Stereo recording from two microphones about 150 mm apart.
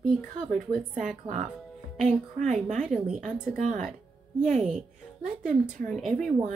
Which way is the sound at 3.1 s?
60° right (ahead or behind).